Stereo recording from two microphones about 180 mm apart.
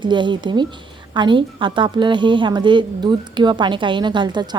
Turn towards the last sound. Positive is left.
turn(degrees=-25)  # may be behind; listen again after turning